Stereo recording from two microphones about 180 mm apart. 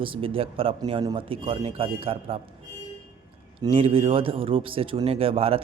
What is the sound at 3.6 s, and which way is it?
Speech, 30° right (ahead or behind).